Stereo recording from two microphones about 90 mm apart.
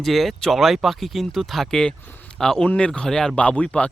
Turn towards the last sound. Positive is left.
turn(degrees=15)  # may be behind; listen again after turning